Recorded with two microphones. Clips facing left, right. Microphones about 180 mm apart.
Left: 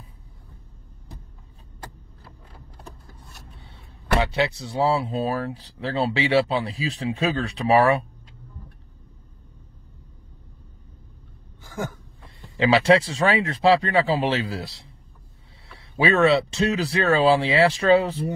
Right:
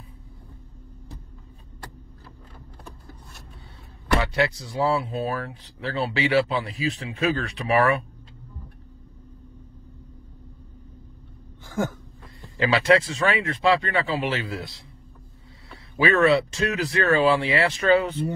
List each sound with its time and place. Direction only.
4.2 s speech: 25° left (ahead or behind)
12.5 s speech: 25° left (ahead or behind)
16.0 s speech: 30° left (ahead or behind)